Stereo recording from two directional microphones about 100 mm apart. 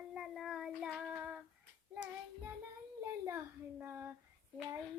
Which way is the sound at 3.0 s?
25° right (ahead or behind).